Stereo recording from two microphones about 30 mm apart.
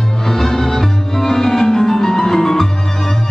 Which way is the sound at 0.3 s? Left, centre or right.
Centre.